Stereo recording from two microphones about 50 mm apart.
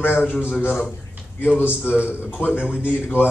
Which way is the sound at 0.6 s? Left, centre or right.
Left.